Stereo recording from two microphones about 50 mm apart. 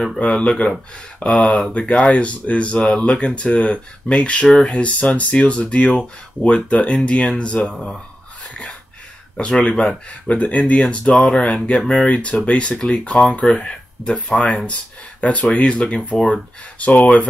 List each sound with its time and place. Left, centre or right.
0.2 s speech: left
9.4 s speech: left